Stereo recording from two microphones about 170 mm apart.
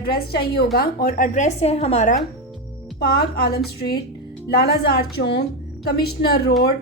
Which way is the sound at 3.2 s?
65° left (ahead or behind).